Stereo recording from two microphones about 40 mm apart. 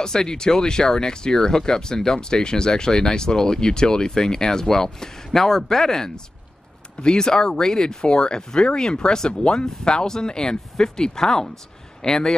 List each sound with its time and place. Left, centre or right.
0.0 s speech: centre